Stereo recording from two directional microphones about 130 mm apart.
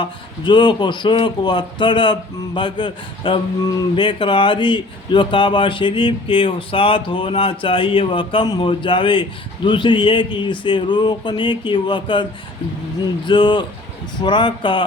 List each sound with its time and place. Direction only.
0.0 s speech: 35° left (ahead or behind)
13.2 s speech: 35° left (ahead or behind)